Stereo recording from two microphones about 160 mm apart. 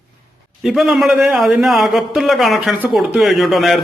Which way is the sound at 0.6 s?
Centre (ahead or behind).